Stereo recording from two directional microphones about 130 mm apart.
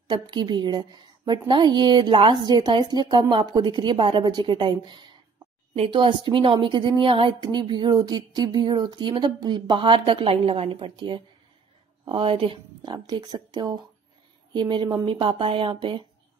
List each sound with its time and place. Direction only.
0.1 s a woman's voice: 35° right (ahead or behind)